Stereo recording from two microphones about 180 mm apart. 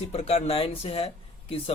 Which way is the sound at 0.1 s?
35° left (ahead or behind).